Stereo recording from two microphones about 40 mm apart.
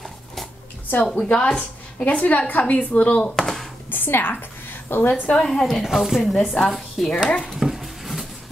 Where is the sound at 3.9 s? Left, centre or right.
Left.